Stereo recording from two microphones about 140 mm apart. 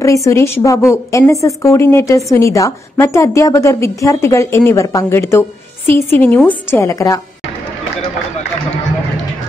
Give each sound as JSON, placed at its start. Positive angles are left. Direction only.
{"t": 0.0, "sound": "a woman's voice", "side_deg": 20}